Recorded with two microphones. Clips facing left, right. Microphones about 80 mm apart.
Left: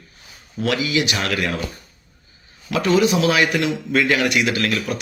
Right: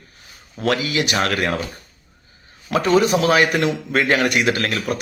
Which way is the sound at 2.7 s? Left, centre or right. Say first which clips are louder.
Right 1 dB; right.